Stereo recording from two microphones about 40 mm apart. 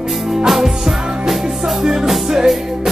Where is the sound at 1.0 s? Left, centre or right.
Centre.